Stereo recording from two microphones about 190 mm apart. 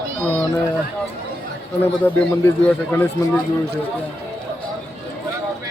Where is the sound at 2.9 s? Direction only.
15° left (ahead or behind).